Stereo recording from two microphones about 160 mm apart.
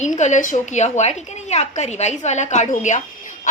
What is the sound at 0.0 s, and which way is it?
A woman's voice, 50° left (ahead or behind).